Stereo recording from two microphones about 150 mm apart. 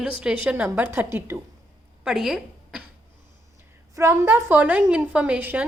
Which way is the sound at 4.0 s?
20° right (ahead or behind).